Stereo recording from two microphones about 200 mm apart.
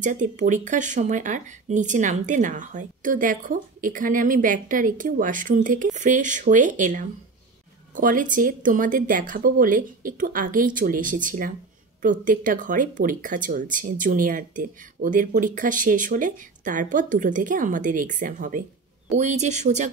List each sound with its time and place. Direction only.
0.0 s speech: 40° right (ahead or behind)